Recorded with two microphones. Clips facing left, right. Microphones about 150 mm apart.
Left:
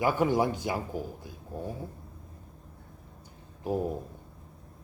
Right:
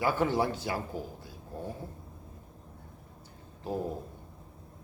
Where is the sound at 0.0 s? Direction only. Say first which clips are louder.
Left 2 dB; 15° left (ahead or behind).